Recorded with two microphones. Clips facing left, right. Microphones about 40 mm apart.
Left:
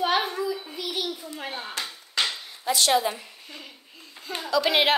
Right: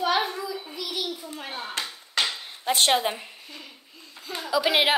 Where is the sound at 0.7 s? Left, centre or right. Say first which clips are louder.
Left 1 dB; left.